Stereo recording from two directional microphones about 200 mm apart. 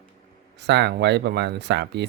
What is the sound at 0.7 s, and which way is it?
Speech, 60° right (ahead or behind).